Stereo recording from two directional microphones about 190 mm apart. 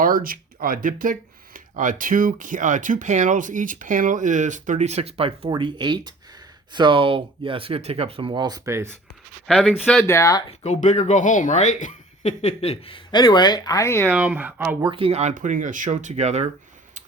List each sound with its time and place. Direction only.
0.0 s speech: 50° right (ahead or behind); by 9.0 s 15° right (ahead or behind)
9.5 s speech: centre (ahead or behind)
10.1 s speech: 15° left (ahead or behind)
10.6 s speech: 35° left (ahead or behind); by 14.1 s 15° left (ahead or behind)
14.1 s speech: 10° right (ahead or behind)
14.8 s speech: 30° right (ahead or behind)